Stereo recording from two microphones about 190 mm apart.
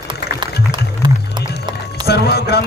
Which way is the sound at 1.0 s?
20° right (ahead or behind).